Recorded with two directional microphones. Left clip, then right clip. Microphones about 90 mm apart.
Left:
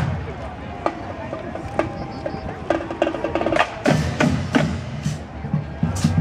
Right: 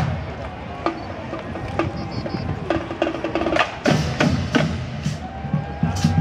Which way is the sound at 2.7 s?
30° left (ahead or behind).